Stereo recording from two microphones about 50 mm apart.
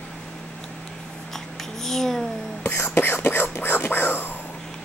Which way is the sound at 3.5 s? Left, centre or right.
Left.